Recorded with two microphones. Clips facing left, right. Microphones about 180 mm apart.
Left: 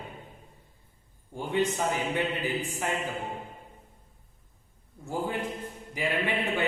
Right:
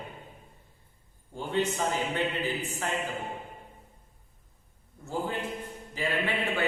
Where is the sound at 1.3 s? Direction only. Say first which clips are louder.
Left 1 dB; 15° left (ahead or behind).